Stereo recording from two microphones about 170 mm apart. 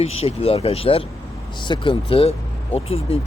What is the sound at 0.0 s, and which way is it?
Speech, 35° left (ahead or behind).